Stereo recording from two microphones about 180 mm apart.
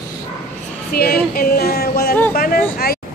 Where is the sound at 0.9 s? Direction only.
60° left (ahead or behind).